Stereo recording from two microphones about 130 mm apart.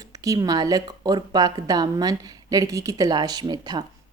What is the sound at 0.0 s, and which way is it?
Speech, 25° right (ahead or behind).